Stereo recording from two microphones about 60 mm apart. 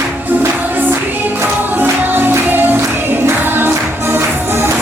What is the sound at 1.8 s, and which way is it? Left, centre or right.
Music, right.